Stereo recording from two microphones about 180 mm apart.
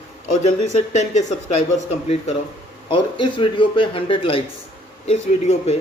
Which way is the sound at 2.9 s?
30° left (ahead or behind).